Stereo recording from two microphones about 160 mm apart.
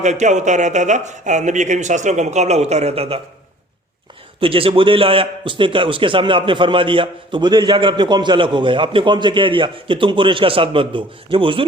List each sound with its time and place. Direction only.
0.0 s speech: 45° right (ahead or behind)
4.4 s a man's voice: 35° right (ahead or behind)